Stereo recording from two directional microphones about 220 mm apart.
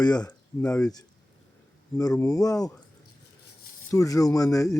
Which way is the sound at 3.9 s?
15° left (ahead or behind).